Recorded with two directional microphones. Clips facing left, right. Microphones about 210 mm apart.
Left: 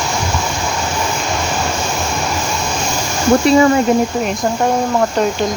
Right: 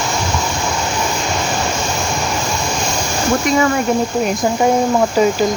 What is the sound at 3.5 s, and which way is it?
Speech, 30° left (ahead or behind).